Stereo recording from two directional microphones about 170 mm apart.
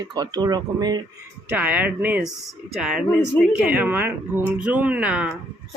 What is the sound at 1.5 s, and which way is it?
Speech, 10° right (ahead or behind).